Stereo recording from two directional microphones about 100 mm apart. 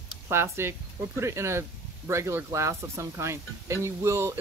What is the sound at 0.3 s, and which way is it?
Speech, 25° right (ahead or behind).